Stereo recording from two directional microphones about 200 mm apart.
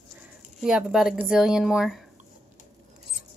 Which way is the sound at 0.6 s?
5° right (ahead or behind).